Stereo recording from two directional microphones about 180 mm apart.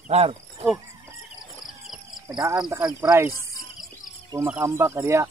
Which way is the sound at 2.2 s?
15° right (ahead or behind).